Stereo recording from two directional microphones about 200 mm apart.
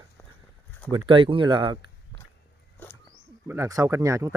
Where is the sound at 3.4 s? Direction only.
15° right (ahead or behind).